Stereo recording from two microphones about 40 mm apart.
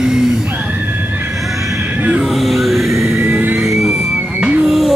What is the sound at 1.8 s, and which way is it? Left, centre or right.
Music, right.